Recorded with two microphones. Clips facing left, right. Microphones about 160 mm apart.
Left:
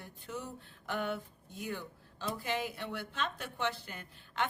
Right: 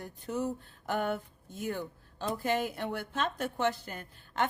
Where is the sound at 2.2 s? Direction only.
50° right (ahead or behind).